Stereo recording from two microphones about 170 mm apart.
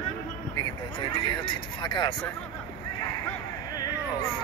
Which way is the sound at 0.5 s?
25° left (ahead or behind).